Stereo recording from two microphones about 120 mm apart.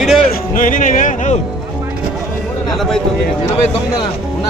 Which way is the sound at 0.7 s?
90° left.